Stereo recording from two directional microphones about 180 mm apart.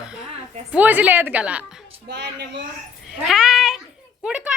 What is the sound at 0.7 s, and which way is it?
Speech, 10° right (ahead or behind).